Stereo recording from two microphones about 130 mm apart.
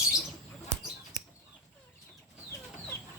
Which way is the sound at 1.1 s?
75° right (ahead or behind).